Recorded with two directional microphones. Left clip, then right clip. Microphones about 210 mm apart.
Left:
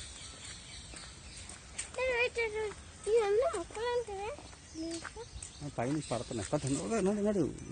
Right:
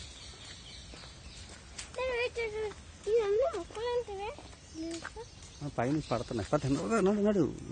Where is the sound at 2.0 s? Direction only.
40° left (ahead or behind).